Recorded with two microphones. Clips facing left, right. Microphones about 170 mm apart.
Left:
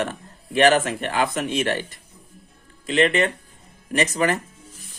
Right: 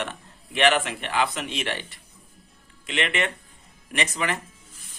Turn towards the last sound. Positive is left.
turn(degrees=40)  # may be behind; listen again after turning